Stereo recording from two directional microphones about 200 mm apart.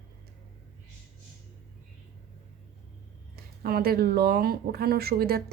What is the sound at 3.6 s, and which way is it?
Speech, 50° right (ahead or behind).